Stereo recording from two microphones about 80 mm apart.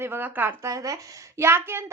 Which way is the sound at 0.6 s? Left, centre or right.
Right.